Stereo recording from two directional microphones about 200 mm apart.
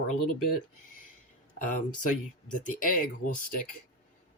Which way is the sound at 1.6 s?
40° left (ahead or behind).